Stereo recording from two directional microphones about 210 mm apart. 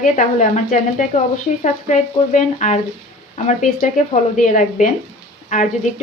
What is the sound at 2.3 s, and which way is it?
Speech, 35° left (ahead or behind).